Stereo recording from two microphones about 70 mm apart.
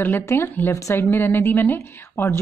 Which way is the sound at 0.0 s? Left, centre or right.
Left.